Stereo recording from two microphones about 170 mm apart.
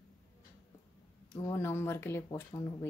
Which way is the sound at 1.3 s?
15° left (ahead or behind).